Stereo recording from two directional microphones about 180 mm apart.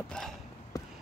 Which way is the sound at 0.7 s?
20° left (ahead or behind).